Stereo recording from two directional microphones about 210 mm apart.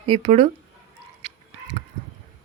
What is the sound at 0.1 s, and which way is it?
Speech, 30° right (ahead or behind).